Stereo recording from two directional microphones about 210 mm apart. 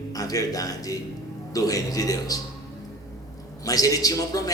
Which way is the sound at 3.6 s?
15° left (ahead or behind).